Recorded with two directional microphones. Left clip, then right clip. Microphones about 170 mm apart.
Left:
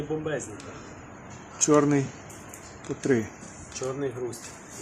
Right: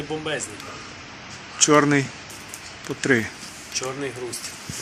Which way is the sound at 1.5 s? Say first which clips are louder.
Right 5 dB; 5° left (ahead or behind).